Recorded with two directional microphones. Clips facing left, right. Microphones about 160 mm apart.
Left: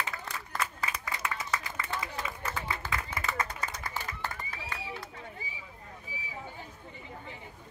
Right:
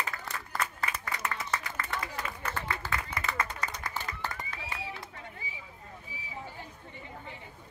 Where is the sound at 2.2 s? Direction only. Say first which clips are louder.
Even; 5° left (ahead or behind).